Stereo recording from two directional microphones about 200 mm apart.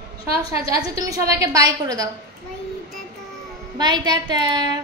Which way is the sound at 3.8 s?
20° right (ahead or behind).